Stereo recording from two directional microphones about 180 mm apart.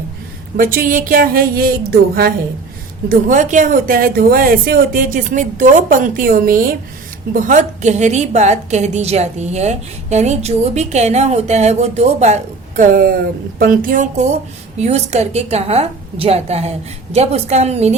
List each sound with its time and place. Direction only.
0.5 s speech: 50° right (ahead or behind)
3.1 s a woman's voice: 45° right (ahead or behind)